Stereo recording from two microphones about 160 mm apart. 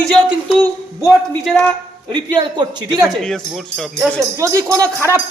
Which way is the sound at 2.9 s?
Centre (ahead or behind).